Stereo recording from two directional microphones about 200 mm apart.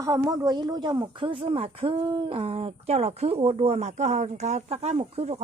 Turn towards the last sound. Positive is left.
turn(degrees=-30)  # may be behind; listen again after turning